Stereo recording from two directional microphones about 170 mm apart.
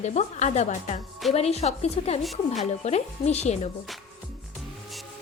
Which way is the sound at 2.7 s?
40° left (ahead or behind).